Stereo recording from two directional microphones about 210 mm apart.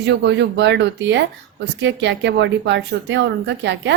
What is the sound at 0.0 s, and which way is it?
Speech, 55° right (ahead or behind).